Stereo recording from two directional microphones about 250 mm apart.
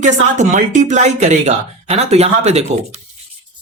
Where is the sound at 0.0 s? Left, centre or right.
Right.